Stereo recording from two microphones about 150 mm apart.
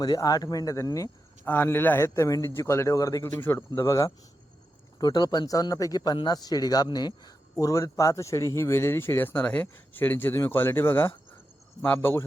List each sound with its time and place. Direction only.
0.0 s speech: 25° left (ahead or behind)